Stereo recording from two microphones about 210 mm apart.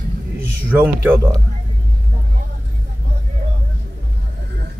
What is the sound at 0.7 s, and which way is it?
Speech, 10° right (ahead or behind).